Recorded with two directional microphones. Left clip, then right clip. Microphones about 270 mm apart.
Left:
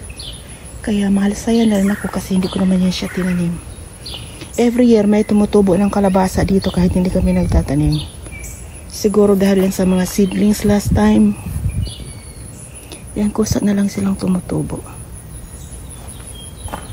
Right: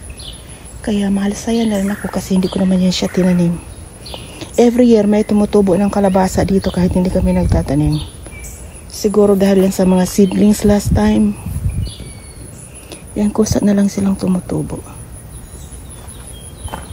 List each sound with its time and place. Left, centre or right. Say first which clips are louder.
0.8 s a woman's voice: even; centre
12.9 s speech: right 3 dB; centre
16.7 s clip-clop: even; centre